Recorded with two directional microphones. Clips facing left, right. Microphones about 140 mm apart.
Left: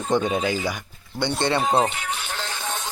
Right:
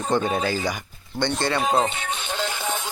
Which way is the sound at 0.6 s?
5° left (ahead or behind).